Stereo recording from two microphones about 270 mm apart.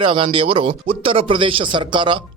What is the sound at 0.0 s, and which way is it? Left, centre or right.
Speech, centre.